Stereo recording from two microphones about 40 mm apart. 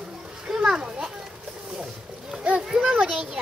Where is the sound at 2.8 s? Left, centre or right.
Right.